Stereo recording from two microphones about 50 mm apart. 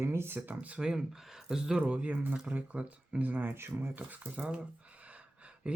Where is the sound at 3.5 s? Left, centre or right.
Right.